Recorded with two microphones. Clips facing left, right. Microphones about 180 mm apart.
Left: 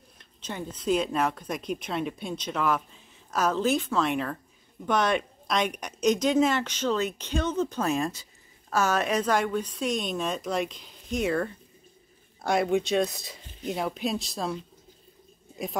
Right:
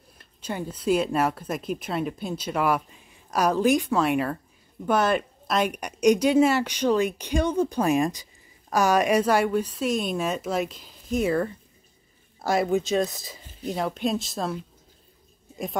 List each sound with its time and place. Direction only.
0.2 s speech: 10° right (ahead or behind)
12.4 s speech: centre (ahead or behind)